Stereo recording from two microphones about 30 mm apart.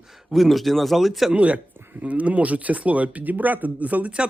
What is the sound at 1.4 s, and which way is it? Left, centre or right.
Speech, right.